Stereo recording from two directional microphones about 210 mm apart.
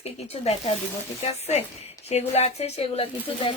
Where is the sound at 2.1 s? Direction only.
30° left (ahead or behind).